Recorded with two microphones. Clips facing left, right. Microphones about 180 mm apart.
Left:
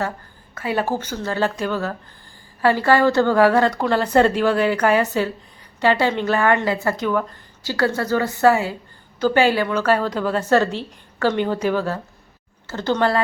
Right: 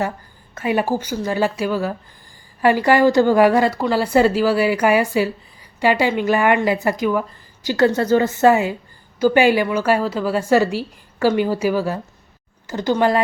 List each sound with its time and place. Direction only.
0.5 s a woman's voice: 15° right (ahead or behind)
3.7 s a woman's voice: 5° right (ahead or behind)